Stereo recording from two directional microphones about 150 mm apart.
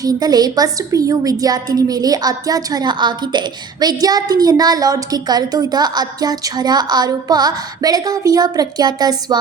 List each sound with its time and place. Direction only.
0.0 s a woman's voice: 25° right (ahead or behind)